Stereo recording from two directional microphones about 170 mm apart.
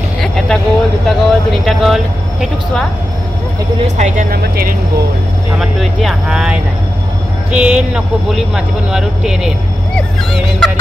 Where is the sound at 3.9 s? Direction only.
45° right (ahead or behind).